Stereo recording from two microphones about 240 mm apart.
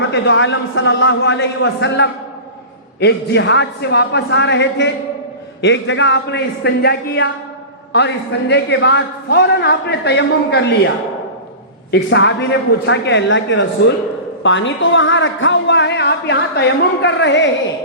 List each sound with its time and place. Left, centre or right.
0.1 s a man's voice: left